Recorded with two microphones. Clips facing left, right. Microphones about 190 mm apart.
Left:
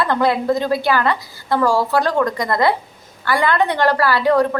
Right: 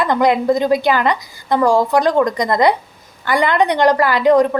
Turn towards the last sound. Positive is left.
turn(degrees=-20)  # may be behind; listen again after turning